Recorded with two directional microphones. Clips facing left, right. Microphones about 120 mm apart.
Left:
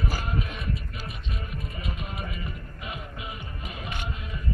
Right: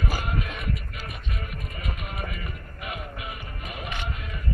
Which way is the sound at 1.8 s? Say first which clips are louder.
Right 2 dB; 20° left (ahead or behind).